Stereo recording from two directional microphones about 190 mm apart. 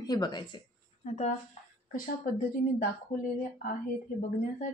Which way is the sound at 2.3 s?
45° left (ahead or behind).